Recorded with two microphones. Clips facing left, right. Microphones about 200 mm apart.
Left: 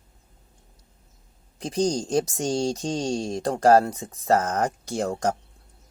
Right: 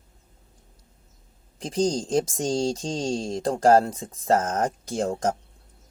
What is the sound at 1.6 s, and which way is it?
Speech, 25° right (ahead or behind).